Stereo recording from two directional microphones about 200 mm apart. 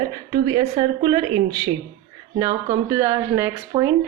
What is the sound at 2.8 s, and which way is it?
A woman's voice, 15° right (ahead or behind).